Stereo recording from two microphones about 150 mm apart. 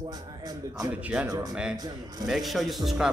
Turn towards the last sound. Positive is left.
turn(degrees=-5)  # may be behind; listen again after turning